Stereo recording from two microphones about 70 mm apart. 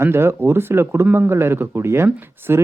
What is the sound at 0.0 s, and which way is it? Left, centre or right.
Speech, right.